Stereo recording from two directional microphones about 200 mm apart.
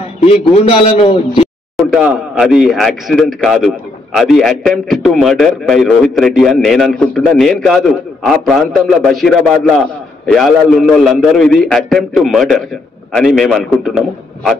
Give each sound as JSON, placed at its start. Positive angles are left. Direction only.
{"t": 0.3, "sound": "a man's voice", "side_deg": 30}
{"t": 1.8, "sound": "a man's voice", "side_deg": -5}